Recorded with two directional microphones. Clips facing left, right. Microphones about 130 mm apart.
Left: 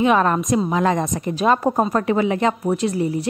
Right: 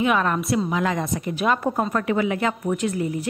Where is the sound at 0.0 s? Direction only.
35° left (ahead or behind).